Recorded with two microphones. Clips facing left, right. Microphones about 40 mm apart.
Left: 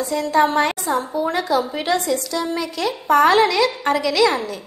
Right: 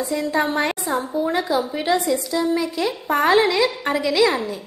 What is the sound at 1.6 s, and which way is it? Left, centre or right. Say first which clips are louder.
Speech: left 1 dB; centre.